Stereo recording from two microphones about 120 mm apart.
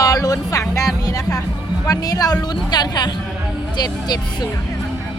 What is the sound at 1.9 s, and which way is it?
Speech, 30° left (ahead or behind).